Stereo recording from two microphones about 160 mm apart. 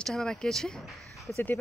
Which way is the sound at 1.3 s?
15° left (ahead or behind).